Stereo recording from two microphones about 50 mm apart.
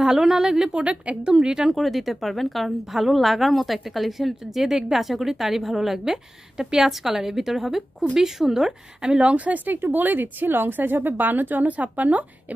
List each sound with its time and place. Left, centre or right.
0.0 s a woman's voice: centre
1.7 s a woman's voice: centre; by 12.3 s right